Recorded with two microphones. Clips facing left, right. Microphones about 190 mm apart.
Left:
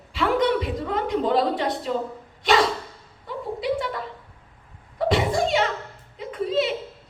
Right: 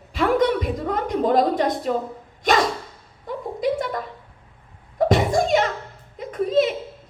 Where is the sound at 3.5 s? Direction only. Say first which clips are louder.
Right 3 dB; 45° right (ahead or behind).